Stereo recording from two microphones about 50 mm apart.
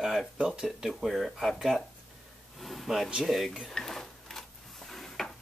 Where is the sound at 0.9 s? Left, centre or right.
Centre.